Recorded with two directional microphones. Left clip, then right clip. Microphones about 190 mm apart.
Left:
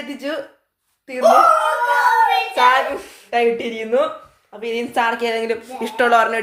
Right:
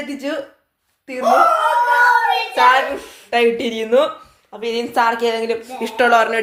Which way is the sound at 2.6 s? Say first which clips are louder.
Right 2 dB; 5° left (ahead or behind).